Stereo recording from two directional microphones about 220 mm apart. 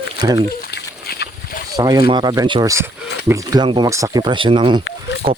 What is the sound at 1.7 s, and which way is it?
Speech, 15° right (ahead or behind).